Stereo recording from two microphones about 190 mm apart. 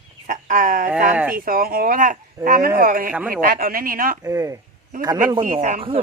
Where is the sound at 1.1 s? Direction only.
10° right (ahead or behind).